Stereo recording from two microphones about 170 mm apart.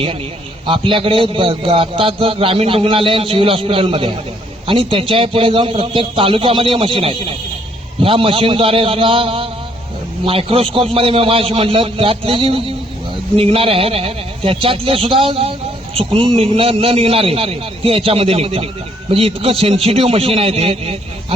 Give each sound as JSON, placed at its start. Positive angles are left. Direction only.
{"t": 0.7, "sound": "a man's voice", "side_deg": -30}